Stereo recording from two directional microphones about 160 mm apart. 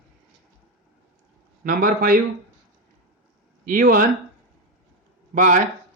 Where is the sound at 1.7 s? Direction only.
65° right (ahead or behind).